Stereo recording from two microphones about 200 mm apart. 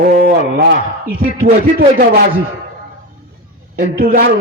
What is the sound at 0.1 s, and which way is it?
Speech, 45° right (ahead or behind).